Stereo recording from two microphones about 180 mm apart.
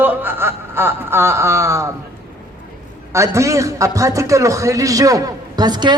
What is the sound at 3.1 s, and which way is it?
A man's voice, 15° right (ahead or behind).